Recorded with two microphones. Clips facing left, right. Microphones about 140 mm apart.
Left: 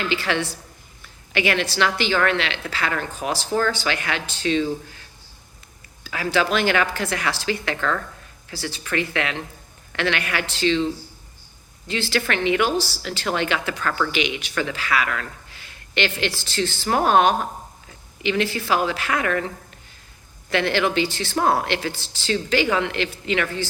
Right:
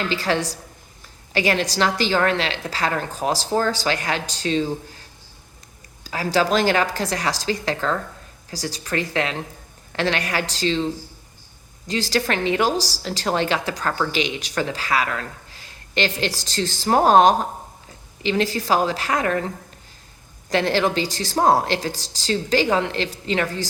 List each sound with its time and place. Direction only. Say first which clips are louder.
0.1 s speech: right 1 dB; 35° right (ahead or behind)
11.9 s speech: right 2 dB; 40° right (ahead or behind)
20.5 s speech: right 1 dB; 35° right (ahead or behind)